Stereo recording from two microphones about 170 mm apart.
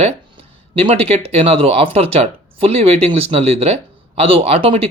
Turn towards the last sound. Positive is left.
turn(degrees=-35)  # may be behind; listen again after turning